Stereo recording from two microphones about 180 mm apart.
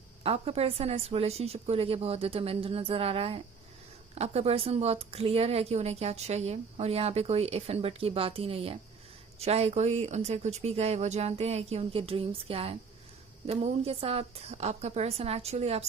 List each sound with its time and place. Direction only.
0.2 s a woman's voice: 35° right (ahead or behind)